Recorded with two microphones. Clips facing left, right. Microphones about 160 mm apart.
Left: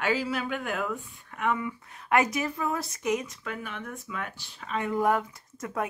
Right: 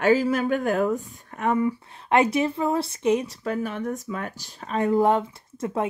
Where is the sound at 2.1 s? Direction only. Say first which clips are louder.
Right 5 dB; 25° right (ahead or behind).